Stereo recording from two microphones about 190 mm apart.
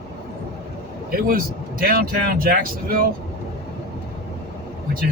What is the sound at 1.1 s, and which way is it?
A man's voice, 50° right (ahead or behind).